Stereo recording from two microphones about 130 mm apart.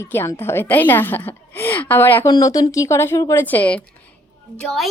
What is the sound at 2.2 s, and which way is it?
A woman's voice, 25° left (ahead or behind).